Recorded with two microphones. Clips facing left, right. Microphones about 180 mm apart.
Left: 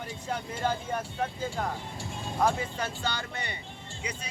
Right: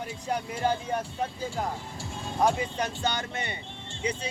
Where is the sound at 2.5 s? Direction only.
20° right (ahead or behind).